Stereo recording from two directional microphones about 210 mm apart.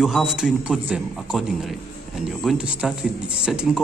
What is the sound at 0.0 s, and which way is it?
A man's voice, centre (ahead or behind).